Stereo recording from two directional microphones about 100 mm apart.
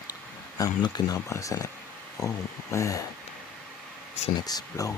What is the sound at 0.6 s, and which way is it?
Speech, 40° left (ahead or behind).